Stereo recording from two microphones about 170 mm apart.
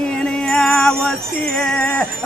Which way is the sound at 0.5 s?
5° left (ahead or behind).